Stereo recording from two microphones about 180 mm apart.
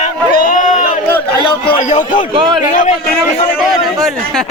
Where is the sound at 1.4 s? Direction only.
30° left (ahead or behind).